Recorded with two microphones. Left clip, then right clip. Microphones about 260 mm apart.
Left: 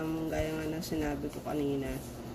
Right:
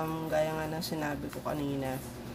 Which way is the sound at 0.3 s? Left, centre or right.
Centre.